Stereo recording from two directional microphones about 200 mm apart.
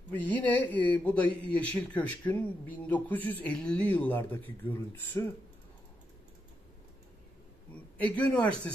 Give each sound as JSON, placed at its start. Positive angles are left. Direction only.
{"t": 0.1, "sound": "speech", "side_deg": 10}
{"t": 7.7, "sound": "a man's voice", "side_deg": 5}